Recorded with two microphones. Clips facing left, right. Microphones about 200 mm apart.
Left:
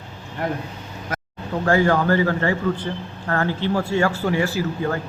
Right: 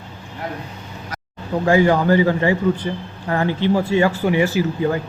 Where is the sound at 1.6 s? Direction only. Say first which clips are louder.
Right 3 dB; 15° right (ahead or behind).